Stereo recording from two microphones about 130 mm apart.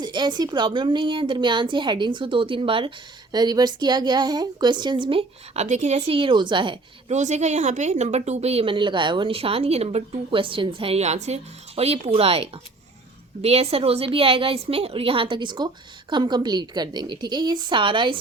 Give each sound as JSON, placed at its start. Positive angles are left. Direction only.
{"t": 0.0, "sound": "a woman's voice", "side_deg": -35}
{"t": 3.3, "sound": "a woman's voice", "side_deg": -30}
{"t": 5.5, "sound": "a woman's voice", "side_deg": -65}
{"t": 6.1, "sound": "a woman's voice", "side_deg": -40}
{"t": 7.1, "sound": "a woman's voice", "side_deg": -60}